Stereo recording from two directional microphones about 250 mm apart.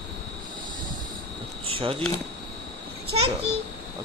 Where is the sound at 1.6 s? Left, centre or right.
Right.